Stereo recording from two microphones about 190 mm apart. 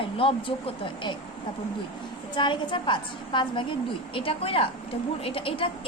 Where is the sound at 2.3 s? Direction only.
25° left (ahead or behind).